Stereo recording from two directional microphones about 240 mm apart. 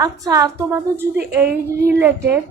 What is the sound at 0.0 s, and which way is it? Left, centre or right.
A woman's voice, centre.